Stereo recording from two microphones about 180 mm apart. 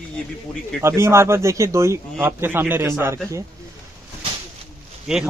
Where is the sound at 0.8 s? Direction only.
15° right (ahead or behind).